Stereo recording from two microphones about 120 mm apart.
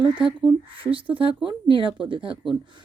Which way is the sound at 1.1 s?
50° right (ahead or behind).